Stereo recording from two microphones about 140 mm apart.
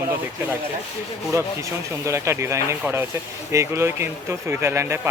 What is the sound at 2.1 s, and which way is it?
Speech, 20° right (ahead or behind).